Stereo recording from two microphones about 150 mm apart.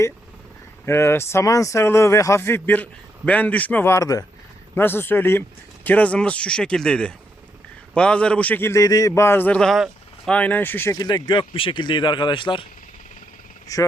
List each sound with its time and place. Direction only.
0.9 s speech: 15° left (ahead or behind)
10.9 s speech: 25° left (ahead or behind)
13.7 s speech: 25° left (ahead or behind)